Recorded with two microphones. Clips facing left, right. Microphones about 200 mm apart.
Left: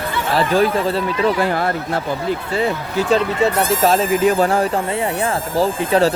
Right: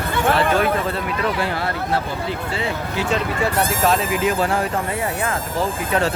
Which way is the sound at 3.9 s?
40° left (ahead or behind).